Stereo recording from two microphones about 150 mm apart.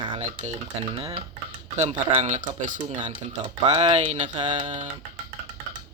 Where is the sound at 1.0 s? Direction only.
40° right (ahead or behind).